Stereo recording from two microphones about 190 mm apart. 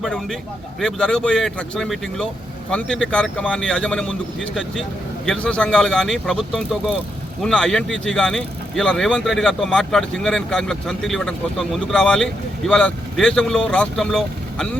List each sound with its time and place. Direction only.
0.0 s speech: centre (ahead or behind)